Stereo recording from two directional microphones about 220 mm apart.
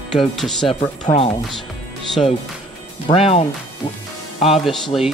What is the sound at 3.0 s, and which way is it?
Speech, 25° left (ahead or behind).